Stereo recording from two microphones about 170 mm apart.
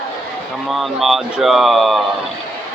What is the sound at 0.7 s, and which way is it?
Speech, centre (ahead or behind).